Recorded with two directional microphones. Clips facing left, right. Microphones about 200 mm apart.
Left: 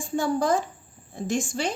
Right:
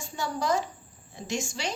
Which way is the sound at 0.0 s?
50° left (ahead or behind).